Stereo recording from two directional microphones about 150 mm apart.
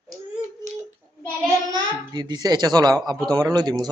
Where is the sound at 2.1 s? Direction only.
30° right (ahead or behind).